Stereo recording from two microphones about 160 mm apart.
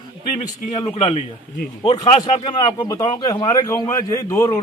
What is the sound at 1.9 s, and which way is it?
A man's voice, 25° left (ahead or behind).